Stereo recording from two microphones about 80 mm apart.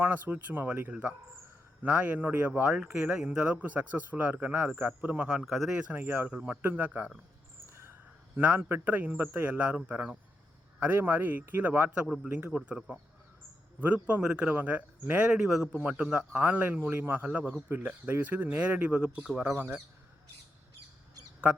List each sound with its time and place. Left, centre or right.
0.0 s speech: right
6.2 s speech: centre
8.4 s speech: right
12.0 s speech: centre
13.8 s speech: centre
19.5 s speech: right